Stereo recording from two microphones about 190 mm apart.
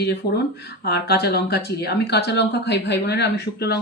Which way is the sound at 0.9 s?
60° left (ahead or behind).